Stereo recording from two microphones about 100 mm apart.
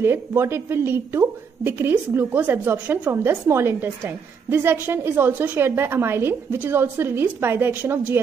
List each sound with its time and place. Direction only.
0.0 s a woman's voice: 25° right (ahead or behind)